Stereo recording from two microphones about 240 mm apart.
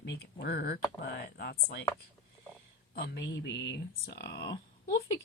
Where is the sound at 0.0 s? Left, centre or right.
Left.